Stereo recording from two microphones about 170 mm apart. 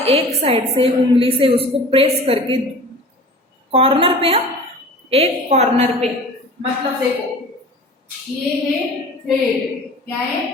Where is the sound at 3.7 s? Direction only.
35° right (ahead or behind).